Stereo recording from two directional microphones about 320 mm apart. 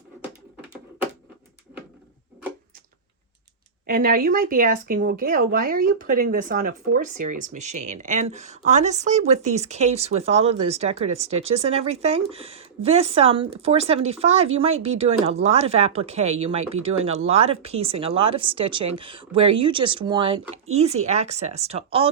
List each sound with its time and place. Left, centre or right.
3.8 s speech: right